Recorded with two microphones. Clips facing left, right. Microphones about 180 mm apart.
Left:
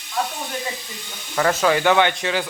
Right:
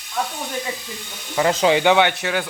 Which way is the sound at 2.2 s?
5° right (ahead or behind).